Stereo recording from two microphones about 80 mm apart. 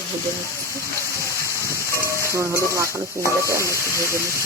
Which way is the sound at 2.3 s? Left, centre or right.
Right.